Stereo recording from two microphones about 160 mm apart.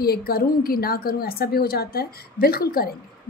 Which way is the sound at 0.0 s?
75° left (ahead or behind).